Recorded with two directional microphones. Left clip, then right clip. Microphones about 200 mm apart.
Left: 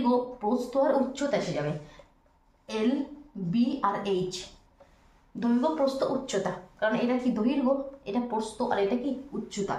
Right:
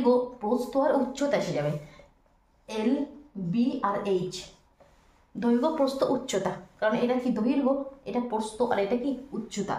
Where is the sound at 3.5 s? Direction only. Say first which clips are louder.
Even; 15° right (ahead or behind).